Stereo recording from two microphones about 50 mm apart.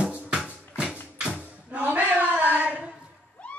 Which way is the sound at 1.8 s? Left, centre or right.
Right.